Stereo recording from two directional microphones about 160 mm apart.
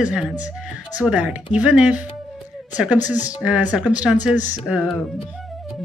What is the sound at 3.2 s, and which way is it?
Speech, 5° right (ahead or behind).